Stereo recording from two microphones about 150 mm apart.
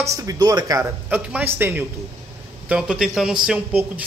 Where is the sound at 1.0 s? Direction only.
10° right (ahead or behind).